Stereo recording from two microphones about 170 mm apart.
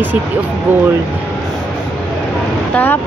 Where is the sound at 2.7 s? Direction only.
10° left (ahead or behind).